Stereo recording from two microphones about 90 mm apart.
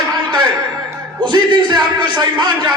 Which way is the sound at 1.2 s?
55° right (ahead or behind).